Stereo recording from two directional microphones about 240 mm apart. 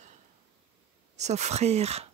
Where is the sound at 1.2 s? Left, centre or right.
Right.